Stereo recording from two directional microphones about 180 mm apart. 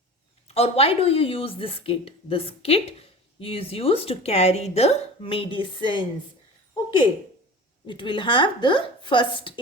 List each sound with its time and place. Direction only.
0.4 s a woman's voice: 35° left (ahead or behind)
7.9 s a woman's voice: 25° left (ahead or behind)